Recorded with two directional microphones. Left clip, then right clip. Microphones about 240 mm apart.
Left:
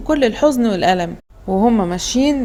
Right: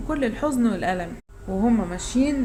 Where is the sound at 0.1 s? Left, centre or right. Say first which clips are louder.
Left 10 dB; left.